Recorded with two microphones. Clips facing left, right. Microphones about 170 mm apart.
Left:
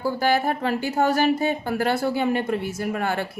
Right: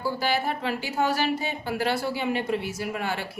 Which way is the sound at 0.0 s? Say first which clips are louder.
Left 5 dB; 50° left (ahead or behind).